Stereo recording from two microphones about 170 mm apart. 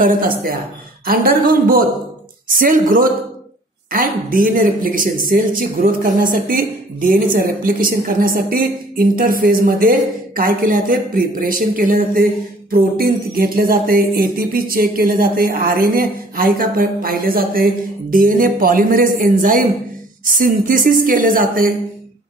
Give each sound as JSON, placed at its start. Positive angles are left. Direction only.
{"t": 0.0, "sound": "a woman's voice", "side_deg": -55}